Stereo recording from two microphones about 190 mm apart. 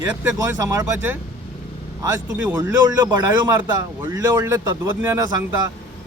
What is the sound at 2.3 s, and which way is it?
Speech, 10° right (ahead or behind).